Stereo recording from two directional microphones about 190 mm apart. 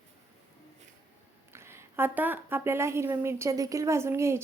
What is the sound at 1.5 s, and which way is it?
A woman's voice, 15° right (ahead or behind).